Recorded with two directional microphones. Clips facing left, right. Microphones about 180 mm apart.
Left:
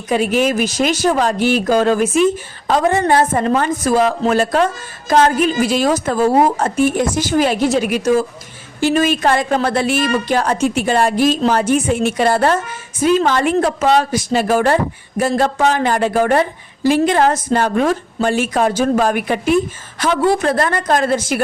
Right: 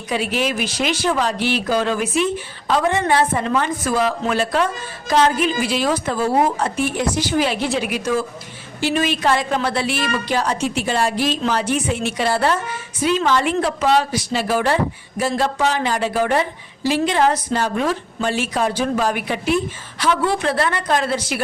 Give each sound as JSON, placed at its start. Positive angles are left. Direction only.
{"t": 0.1, "sound": "speech", "side_deg": 45}